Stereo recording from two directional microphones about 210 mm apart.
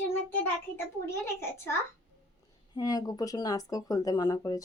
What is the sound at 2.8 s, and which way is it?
Speech, 20° left (ahead or behind).